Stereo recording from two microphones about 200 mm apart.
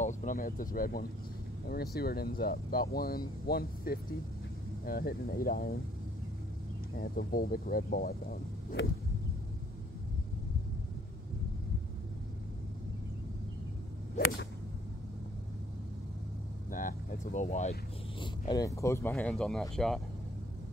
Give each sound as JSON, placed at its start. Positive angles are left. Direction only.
{"t": 0.0, "sound": "speech", "side_deg": 40}
{"t": 7.0, "sound": "speech", "side_deg": 45}
{"t": 16.7, "sound": "vehicle", "side_deg": 40}
{"t": 18.5, "sound": "speech", "side_deg": 15}